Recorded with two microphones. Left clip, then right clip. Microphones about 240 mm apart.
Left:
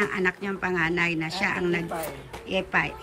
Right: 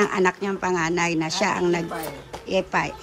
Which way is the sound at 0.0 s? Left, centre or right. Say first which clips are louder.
Right 5 dB; centre.